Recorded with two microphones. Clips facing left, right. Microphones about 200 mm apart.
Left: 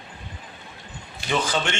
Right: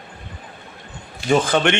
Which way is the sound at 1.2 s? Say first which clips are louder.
Right 8 dB; 55° right (ahead or behind).